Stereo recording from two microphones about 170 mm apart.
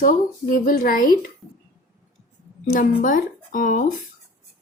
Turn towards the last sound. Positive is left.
turn(degrees=50)  # may be behind; listen again after turning